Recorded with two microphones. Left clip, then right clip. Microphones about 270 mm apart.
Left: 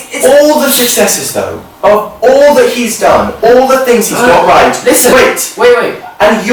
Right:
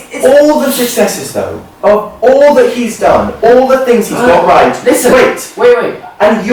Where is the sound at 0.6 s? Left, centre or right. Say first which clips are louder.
Left 2 dB; centre.